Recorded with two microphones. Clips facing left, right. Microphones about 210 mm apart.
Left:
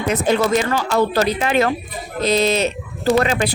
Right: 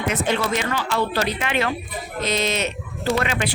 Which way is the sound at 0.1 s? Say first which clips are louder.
Left 6 dB; 40° left (ahead or behind).